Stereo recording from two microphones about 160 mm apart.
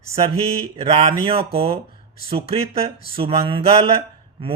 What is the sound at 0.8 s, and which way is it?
Speech, 40° right (ahead or behind).